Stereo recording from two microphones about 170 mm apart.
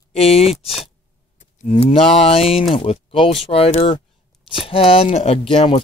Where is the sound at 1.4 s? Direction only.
40° left (ahead or behind).